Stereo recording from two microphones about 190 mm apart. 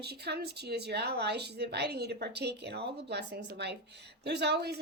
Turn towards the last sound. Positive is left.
turn(degrees=-60)  # may be behind; listen again after turning